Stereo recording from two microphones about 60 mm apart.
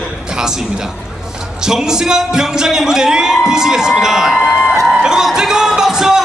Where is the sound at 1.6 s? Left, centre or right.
Centre.